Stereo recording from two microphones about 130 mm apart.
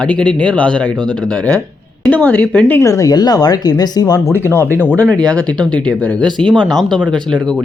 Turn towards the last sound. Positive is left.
turn(degrees=5)  # may be behind; listen again after turning